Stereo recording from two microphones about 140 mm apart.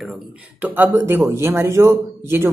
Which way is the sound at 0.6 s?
15° right (ahead or behind).